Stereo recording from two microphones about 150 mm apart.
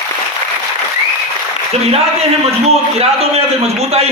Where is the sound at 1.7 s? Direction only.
45° right (ahead or behind).